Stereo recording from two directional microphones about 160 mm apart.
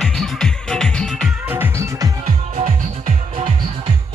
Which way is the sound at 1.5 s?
15° right (ahead or behind).